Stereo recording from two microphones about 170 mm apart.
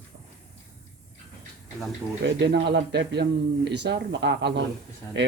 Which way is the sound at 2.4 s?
90° right.